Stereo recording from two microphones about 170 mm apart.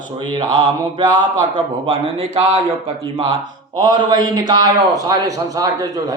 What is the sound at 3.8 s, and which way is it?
A man's voice, 25° right (ahead or behind).